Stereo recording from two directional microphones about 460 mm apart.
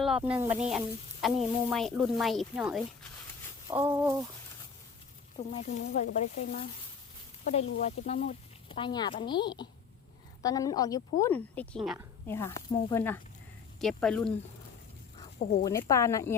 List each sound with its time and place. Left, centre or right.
0.0 s speech: centre
3.7 s a sound: centre
5.4 s speech: centre
7.8 s speech: centre
15.6 s speech: centre